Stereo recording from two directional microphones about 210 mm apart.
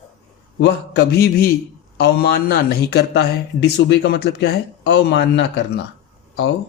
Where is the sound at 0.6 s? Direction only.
50° left (ahead or behind).